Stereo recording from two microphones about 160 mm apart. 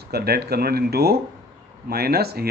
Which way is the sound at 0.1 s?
80° right.